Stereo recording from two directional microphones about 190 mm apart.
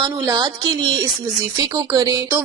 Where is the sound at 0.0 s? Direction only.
20° right (ahead or behind).